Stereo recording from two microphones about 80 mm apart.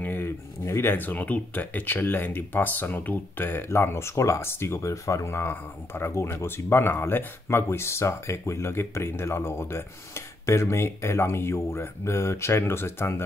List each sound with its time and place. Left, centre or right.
0.0 s speech: left